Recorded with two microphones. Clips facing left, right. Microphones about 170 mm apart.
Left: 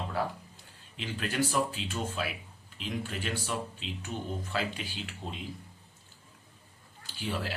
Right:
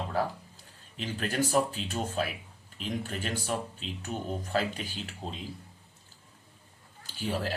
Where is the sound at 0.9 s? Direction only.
40° right (ahead or behind).